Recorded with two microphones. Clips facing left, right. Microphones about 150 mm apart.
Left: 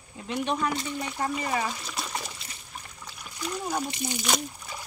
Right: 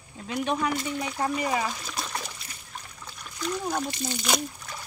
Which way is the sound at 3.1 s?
5° left (ahead or behind).